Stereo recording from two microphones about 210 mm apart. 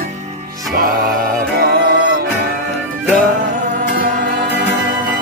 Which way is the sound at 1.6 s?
45° right (ahead or behind).